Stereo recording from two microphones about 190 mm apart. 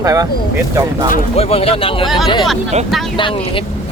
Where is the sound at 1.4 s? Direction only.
30° left (ahead or behind).